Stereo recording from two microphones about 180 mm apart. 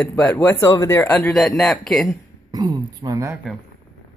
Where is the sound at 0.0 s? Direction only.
10° left (ahead or behind).